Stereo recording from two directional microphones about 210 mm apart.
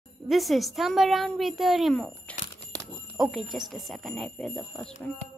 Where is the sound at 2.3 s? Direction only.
40° left (ahead or behind).